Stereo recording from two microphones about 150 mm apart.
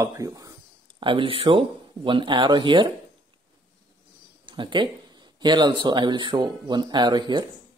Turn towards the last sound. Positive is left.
turn(degrees=-30)  # may be behind; listen again after turning